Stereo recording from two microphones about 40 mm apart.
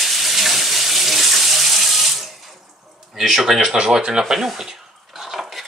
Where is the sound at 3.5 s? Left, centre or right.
Right.